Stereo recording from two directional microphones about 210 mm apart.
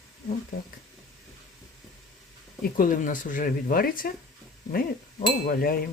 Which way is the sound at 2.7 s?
40° left (ahead or behind).